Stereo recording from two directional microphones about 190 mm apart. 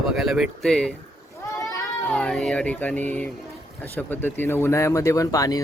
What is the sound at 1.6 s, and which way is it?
Cat, 15° left (ahead or behind).